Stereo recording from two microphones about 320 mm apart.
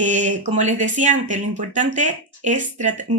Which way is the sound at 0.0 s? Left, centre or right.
Right.